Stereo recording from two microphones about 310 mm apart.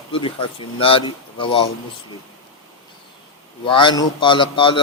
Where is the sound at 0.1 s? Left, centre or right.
Centre.